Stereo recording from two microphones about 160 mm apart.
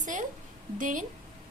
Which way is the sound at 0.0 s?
50° right (ahead or behind).